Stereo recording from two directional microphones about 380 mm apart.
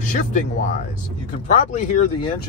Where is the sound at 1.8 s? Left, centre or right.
Centre.